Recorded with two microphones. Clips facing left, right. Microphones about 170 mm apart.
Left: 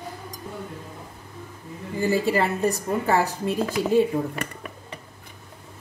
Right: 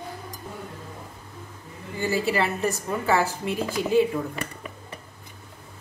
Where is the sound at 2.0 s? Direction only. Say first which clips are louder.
Left 3 dB; 35° left (ahead or behind).